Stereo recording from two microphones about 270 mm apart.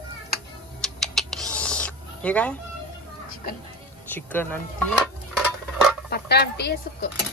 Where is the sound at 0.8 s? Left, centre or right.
Centre.